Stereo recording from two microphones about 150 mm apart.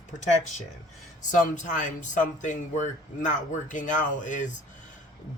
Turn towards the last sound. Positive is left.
turn(degrees=55)  # may be behind; listen again after turning